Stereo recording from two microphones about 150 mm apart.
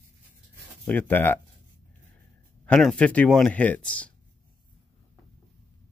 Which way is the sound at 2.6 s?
5° left (ahead or behind).